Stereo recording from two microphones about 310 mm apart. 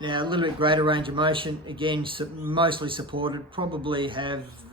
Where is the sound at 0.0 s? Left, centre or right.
Centre.